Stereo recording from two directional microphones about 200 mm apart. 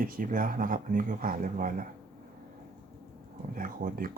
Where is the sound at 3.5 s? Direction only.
45° right (ahead or behind).